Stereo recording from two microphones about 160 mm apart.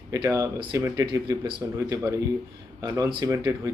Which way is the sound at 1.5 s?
30° right (ahead or behind).